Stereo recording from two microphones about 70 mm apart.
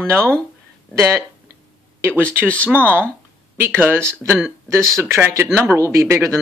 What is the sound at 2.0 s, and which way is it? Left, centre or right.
Speech, right.